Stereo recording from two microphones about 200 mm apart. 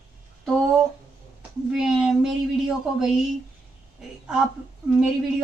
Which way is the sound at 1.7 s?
5° right (ahead or behind).